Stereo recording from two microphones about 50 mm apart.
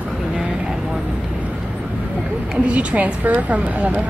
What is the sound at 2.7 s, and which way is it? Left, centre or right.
A woman's voice, right.